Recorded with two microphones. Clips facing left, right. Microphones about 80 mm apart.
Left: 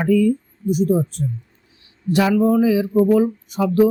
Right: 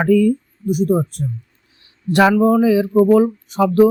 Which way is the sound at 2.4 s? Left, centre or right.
Right.